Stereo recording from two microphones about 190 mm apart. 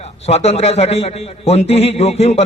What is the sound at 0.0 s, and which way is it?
A man's voice, 35° left (ahead or behind).